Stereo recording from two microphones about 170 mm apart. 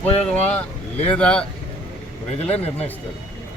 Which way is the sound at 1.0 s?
5° left (ahead or behind).